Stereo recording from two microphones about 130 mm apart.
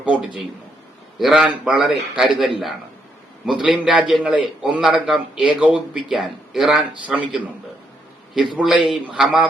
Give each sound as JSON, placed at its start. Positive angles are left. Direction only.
{"t": 0.0, "sound": "a sound", "side_deg": -10}
{"t": 1.2, "sound": "a man's voice", "side_deg": -5}
{"t": 8.5, "sound": "a man's voice", "side_deg": -5}